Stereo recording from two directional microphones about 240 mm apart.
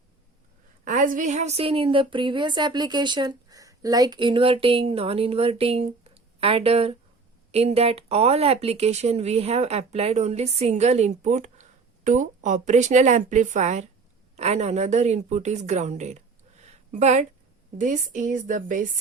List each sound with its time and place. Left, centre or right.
0.9 s a woman's voice: right